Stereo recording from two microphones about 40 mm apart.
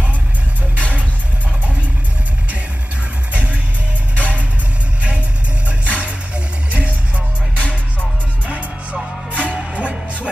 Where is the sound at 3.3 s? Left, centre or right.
Right.